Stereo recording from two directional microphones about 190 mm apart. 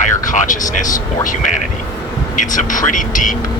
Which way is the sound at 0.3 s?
45° left (ahead or behind).